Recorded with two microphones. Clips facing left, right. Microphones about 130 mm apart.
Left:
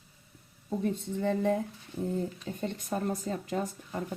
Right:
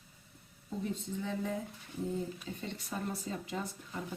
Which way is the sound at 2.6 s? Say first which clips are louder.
Left 8 dB; 50° left (ahead or behind).